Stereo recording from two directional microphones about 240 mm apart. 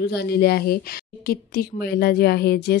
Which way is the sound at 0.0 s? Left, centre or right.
Left.